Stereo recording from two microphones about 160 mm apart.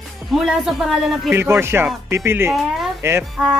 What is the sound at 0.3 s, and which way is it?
Speech, centre (ahead or behind).